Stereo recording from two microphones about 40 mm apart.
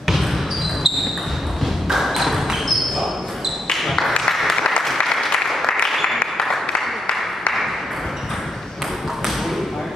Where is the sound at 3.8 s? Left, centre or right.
Centre.